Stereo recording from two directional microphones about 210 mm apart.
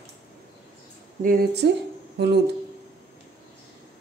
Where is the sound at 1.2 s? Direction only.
45° right (ahead or behind).